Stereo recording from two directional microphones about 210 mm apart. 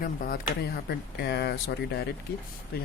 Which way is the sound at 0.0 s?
40° left (ahead or behind).